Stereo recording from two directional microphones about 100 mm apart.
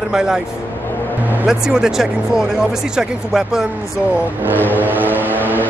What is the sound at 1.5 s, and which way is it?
Speech, 5° right (ahead or behind).